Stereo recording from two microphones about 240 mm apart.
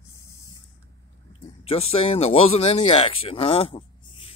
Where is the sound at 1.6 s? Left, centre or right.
Left.